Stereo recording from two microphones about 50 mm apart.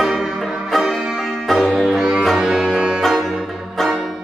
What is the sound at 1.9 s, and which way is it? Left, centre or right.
Music, centre.